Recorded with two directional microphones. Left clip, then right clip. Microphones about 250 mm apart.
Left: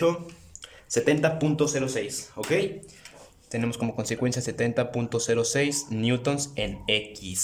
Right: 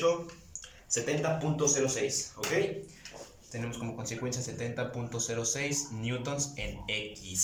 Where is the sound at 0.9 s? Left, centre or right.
Left.